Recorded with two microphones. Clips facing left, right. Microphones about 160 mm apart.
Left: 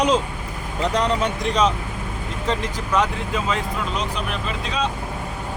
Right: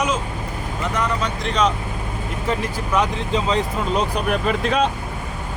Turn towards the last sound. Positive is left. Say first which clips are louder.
# right 6 dB
turn(degrees=-55)  # may be behind; listen again after turning